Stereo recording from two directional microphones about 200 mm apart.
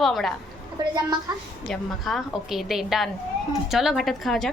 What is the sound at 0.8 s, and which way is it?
Speech, 20° right (ahead or behind).